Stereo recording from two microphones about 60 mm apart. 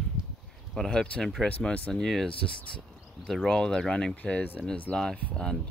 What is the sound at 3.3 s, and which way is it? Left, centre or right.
Speech, centre.